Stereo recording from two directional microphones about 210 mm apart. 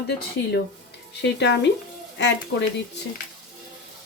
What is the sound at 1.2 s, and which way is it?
Speech, 55° left (ahead or behind).